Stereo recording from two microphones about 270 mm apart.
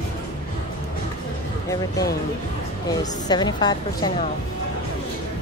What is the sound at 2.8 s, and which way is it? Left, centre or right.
Speech, centre.